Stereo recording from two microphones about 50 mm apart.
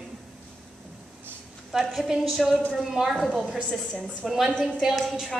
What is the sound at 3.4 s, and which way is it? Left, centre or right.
Speech, centre.